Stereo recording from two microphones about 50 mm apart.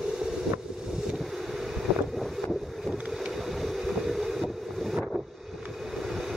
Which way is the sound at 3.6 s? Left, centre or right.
Centre.